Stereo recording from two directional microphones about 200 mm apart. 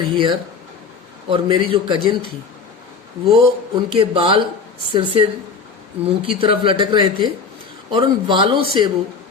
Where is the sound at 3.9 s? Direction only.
25° right (ahead or behind).